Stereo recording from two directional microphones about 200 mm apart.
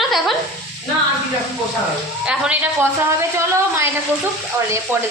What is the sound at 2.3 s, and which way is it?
Speech, 5° right (ahead or behind).